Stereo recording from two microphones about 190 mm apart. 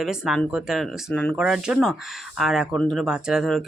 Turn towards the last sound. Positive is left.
turn(degrees=0)  # may be behind; listen again after turning